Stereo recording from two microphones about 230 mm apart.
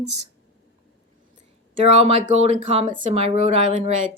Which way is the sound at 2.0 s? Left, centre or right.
Right.